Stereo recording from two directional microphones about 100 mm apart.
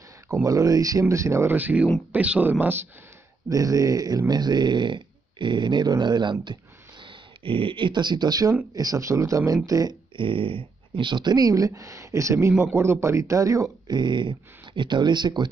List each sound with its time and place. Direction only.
0.3 s speech: 35° right (ahead or behind); by 2.5 s 15° right (ahead or behind)
3.4 s speech: 35° right (ahead or behind)
10.1 s speech: 60° right (ahead or behind); by 13.9 s 35° right (ahead or behind)
13.9 s speech: 50° right (ahead or behind)